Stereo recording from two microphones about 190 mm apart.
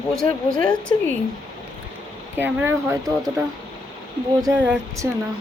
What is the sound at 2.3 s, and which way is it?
Speech, 10° right (ahead or behind).